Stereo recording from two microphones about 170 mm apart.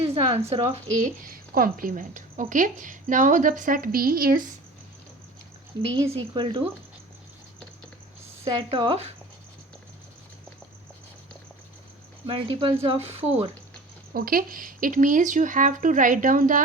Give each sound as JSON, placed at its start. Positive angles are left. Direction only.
{"t": 0.0, "sound": "a woman's voice", "side_deg": -35}
{"t": 1.3, "sound": "a woman's voice", "side_deg": -55}
{"t": 6.1, "sound": "a woman's voice", "side_deg": -30}
{"t": 8.4, "sound": "speech", "side_deg": -30}
{"t": 12.2, "sound": "speech", "side_deg": -30}
{"t": 14.1, "sound": "a woman's voice", "side_deg": -60}